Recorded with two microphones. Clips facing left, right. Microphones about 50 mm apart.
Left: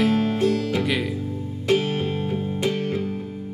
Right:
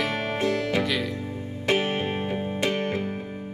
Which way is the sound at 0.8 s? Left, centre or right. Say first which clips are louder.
Left 3 dB; centre.